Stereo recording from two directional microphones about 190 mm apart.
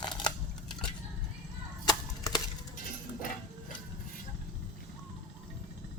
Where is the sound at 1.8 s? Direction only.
20° left (ahead or behind).